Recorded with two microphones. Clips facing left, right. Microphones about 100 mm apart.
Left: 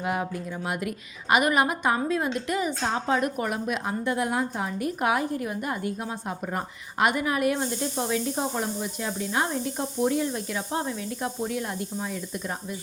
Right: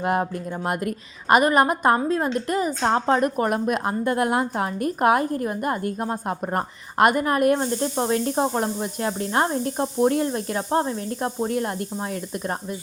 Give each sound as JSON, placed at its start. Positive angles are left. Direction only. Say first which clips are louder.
{"t": 0.0, "sound": "a woman's voice", "louder": "right 5 dB", "side_deg": -50}
{"t": 4.9, "sound": "a woman's voice", "louder": "right 6 dB", "side_deg": -45}